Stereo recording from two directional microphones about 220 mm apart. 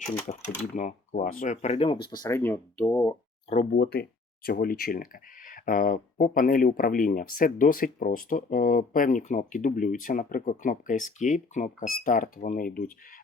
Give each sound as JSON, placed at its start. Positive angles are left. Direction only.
{"t": 0.3, "sound": "speech", "side_deg": 35}
{"t": 3.5, "sound": "speech", "side_deg": 35}
{"t": 3.8, "sound": "speech", "side_deg": 45}